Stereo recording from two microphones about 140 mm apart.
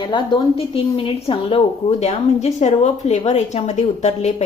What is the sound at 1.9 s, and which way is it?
Speech, 50° left (ahead or behind).